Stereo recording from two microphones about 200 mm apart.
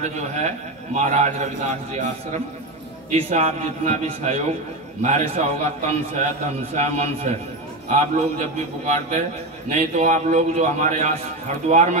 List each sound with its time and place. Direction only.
0.0 s a man's voice: 35° right (ahead or behind)